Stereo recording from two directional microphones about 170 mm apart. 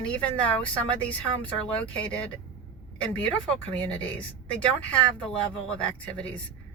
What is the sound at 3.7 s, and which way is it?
Speech, 10° left (ahead or behind).